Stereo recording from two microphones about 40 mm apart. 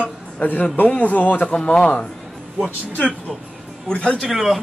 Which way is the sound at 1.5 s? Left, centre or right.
Left.